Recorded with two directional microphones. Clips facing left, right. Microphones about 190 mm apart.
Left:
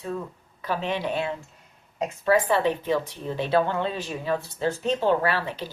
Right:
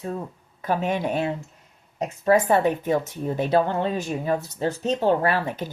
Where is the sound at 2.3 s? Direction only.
45° right (ahead or behind).